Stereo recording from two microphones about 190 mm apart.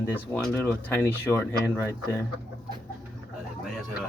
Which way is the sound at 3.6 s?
Centre (ahead or behind).